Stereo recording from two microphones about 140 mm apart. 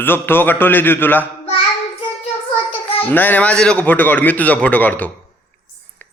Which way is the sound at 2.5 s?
40° left (ahead or behind).